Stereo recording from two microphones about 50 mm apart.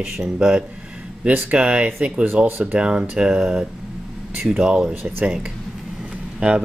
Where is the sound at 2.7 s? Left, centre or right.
Centre.